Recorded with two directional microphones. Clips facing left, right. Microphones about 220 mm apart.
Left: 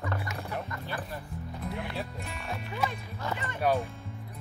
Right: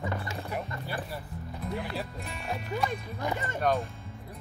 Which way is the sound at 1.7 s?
Centre (ahead or behind).